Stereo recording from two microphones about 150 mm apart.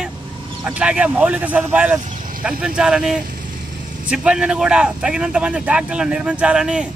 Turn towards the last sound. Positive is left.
turn(degrees=-5)  # may be behind; listen again after turning